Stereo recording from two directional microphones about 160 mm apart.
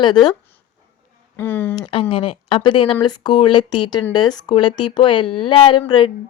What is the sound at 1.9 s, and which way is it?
Speech, 30° left (ahead or behind).